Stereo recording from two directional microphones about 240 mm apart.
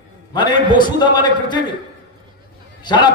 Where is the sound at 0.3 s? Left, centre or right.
Centre.